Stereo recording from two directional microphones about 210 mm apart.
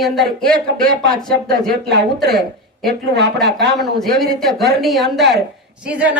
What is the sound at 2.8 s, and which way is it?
Speech, 50° right (ahead or behind).